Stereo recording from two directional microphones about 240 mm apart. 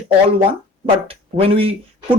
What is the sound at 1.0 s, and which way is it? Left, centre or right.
Speech, right.